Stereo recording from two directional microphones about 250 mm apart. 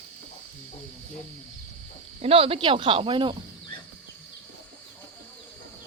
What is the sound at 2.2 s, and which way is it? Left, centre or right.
Speech, right.